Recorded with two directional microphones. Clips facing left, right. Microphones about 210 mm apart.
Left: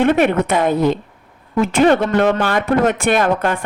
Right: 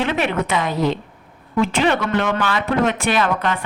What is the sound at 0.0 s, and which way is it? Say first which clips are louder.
A woman's voice: left 7 dB; 50° left (ahead or behind).